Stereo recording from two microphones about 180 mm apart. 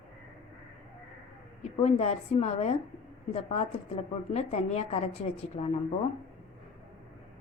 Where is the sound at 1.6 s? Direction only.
35° left (ahead or behind).